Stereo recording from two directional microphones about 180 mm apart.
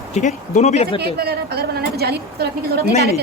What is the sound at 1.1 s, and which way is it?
A woman's voice, 60° right (ahead or behind).